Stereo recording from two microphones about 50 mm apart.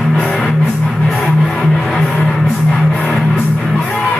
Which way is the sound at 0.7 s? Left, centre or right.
Centre.